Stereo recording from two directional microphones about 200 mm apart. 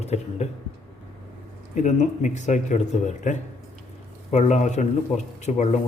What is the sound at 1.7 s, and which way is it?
A man's voice, 40° left (ahead or behind).